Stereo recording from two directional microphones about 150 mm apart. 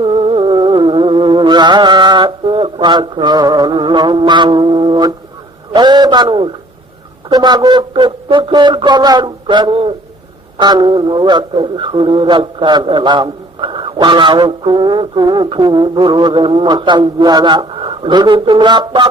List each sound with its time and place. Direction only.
0.0 s music: 35° right (ahead or behind)
5.7 s a man's voice: 30° right (ahead or behind)